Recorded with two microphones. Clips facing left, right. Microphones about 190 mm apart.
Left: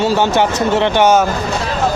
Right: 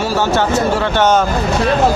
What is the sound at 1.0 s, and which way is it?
Speech, 10° left (ahead or behind).